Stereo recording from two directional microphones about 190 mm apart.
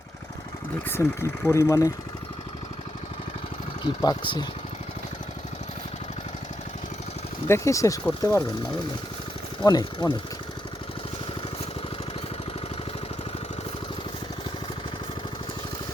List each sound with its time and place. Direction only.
0.9 s speech: 15° left (ahead or behind)
3.8 s speech: 25° left (ahead or behind)
7.4 s speech: 15° left (ahead or behind)
9.6 s speech: 20° left (ahead or behind)